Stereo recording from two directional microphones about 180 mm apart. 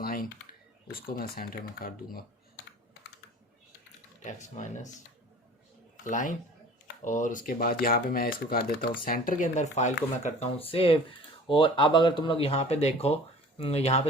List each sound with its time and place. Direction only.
0.0 s computer keyboard: 55° left (ahead or behind)
0.9 s speech: 55° left (ahead or behind)
4.2 s speech: 40° left (ahead or behind)
6.1 s speech: 45° left (ahead or behind)